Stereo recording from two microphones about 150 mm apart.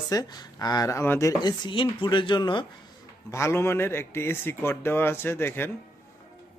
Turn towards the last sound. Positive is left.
turn(degrees=15)  # may be behind; listen again after turning